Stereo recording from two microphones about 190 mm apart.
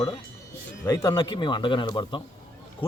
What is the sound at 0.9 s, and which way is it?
Speech, 20° left (ahead or behind).